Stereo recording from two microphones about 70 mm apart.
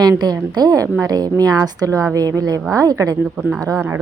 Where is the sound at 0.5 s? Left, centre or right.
Right.